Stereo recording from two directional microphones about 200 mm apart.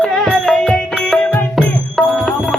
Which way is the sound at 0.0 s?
5° left (ahead or behind).